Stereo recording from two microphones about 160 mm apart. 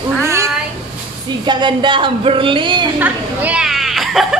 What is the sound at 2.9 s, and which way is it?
A child's voice, 10° right (ahead or behind).